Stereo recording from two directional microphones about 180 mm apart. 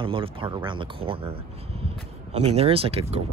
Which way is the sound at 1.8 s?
35° right (ahead or behind).